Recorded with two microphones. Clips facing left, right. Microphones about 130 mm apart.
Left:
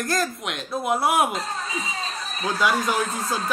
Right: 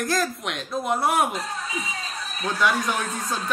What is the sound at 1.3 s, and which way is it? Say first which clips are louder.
Speech: left 1 dB; 30° left (ahead or behind).